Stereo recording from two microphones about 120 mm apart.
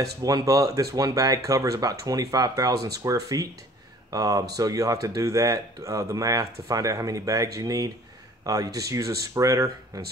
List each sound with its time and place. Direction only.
0.0 s speech: 30° right (ahead or behind)